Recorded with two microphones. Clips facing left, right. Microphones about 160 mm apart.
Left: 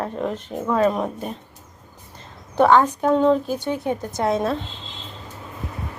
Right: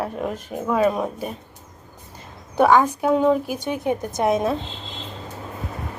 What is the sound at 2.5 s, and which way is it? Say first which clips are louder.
A child's voice: left 1 dB; 10° right (ahead or behind).